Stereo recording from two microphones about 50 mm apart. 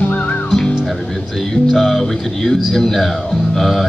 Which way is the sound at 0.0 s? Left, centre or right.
Left.